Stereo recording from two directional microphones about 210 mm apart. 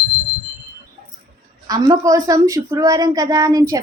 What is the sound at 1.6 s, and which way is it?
A woman's voice, 20° right (ahead or behind).